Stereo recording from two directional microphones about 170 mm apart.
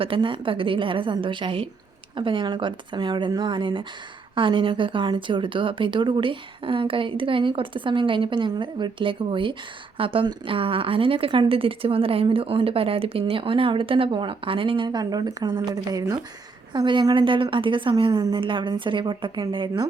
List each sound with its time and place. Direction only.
0.0 s a woman's voice: 30° right (ahead or behind)